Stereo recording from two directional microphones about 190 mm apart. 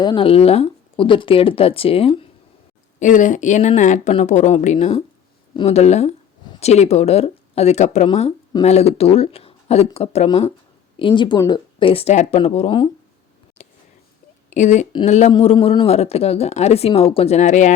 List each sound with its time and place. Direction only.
0.0 s speech: 25° left (ahead or behind)
3.0 s speech: 40° left (ahead or behind)
13.6 s a sound: 35° left (ahead or behind)
14.5 s speech: 40° left (ahead or behind)